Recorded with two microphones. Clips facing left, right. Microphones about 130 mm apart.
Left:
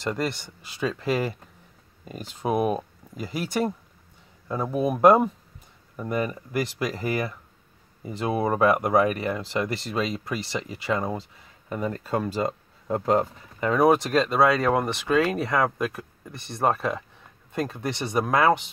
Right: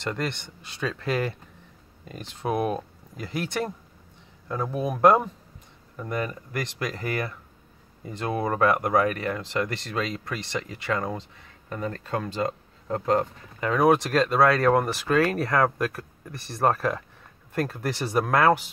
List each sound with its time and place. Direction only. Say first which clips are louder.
0.0 s speech: left 2 dB; 5° left (ahead or behind)
14.4 s speech: right 2 dB; 10° left (ahead or behind)
15.8 s speech: even; 20° left (ahead or behind)
16.3 s speech: right 1 dB; centre (ahead or behind)